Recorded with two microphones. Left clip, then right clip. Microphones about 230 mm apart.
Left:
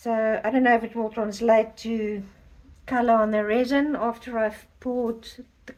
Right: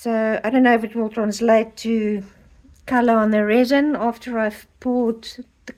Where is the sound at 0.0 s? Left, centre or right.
Right.